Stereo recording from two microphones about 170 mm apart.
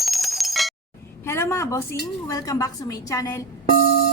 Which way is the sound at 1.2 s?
15° left (ahead or behind).